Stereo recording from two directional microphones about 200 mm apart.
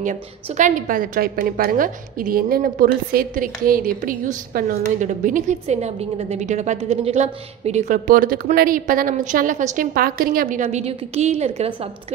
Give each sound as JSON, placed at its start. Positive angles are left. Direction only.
{"t": 0.0, "sound": "a woman's voice", "side_deg": -40}